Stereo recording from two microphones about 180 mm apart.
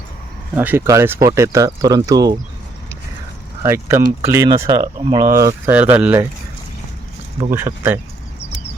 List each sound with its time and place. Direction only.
0.5 s speech: 10° right (ahead or behind)
3.6 s speech: 15° right (ahead or behind)
7.5 s speech: 10° right (ahead or behind)